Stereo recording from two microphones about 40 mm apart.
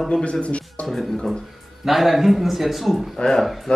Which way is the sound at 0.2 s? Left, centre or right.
Left.